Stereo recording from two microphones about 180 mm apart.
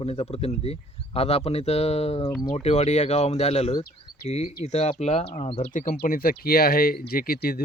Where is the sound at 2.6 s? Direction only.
35° left (ahead or behind).